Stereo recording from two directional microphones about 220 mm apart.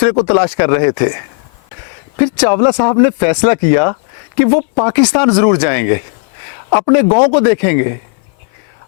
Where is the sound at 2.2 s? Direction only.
15° left (ahead or behind).